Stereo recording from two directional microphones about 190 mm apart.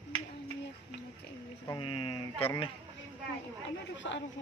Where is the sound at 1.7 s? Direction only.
25° left (ahead or behind).